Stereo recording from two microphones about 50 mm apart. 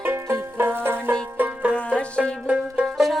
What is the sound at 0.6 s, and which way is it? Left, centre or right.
Banjo, right.